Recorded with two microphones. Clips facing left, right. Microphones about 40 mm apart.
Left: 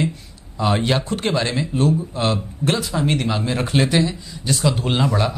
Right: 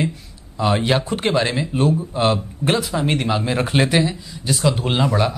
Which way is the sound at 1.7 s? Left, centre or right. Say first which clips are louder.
Even; right.